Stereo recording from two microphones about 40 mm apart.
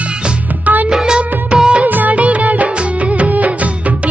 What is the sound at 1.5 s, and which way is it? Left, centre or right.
Music of bollywood, centre.